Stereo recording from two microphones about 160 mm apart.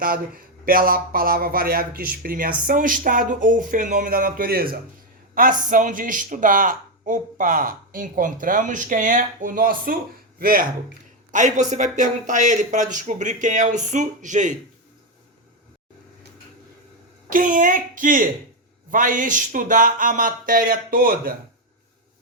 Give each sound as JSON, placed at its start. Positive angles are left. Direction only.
{"t": 0.6, "sound": "speech", "side_deg": -65}
{"t": 11.3, "sound": "speech", "side_deg": -50}
{"t": 17.2, "sound": "speech", "side_deg": -55}